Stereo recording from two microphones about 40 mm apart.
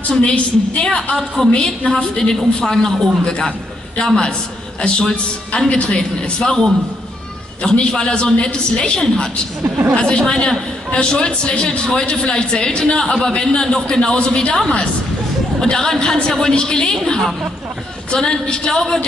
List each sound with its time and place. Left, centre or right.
0.2 s a woman's voice: left
1.1 s a woman's voice: centre
1.5 s speech: left
15.6 s speech: centre